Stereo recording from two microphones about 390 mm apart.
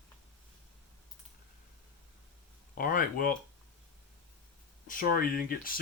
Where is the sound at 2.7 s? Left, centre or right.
Left.